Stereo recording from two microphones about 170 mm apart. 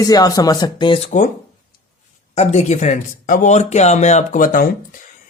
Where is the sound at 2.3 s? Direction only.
40° left (ahead or behind).